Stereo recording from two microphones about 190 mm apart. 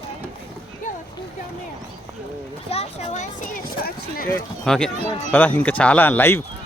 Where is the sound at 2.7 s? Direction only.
35° left (ahead or behind); by 4.2 s 50° left (ahead or behind).